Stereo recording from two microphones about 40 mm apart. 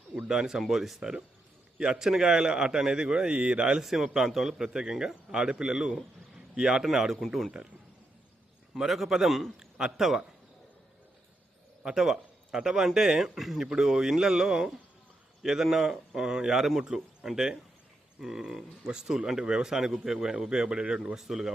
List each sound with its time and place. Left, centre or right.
0.3 s a man's voice: centre
3.8 s speech: centre
8.7 s speech: centre
9.6 s a sound: right
11.8 s speech: centre
13.7 s speech: centre
20.1 s a man's voice: right
21.2 s speech: centre